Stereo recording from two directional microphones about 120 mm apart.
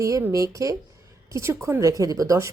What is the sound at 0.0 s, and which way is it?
A woman's voice, 25° right (ahead or behind).